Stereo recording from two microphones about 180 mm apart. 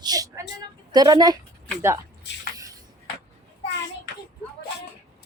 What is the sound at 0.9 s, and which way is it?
Speech, 20° right (ahead or behind).